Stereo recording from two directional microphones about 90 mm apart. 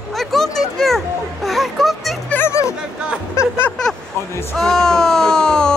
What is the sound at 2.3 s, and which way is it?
Music, 30° left (ahead or behind).